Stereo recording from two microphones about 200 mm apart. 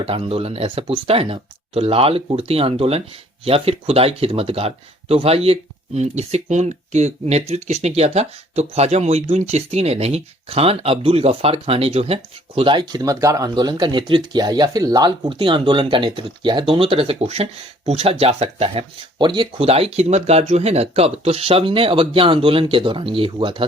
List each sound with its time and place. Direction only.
0.0 s speech: 30° right (ahead or behind)